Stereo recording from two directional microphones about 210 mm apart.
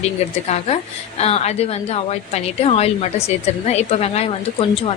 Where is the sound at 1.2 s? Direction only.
30° left (ahead or behind).